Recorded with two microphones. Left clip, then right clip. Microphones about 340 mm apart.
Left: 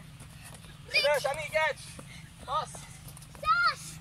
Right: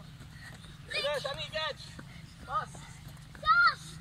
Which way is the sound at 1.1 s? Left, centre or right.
Left.